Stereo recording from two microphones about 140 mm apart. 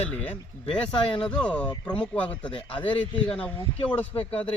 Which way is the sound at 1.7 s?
35° left (ahead or behind).